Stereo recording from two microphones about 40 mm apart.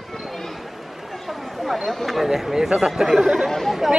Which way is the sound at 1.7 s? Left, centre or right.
Centre.